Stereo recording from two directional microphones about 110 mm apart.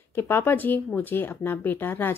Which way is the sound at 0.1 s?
20° left (ahead or behind).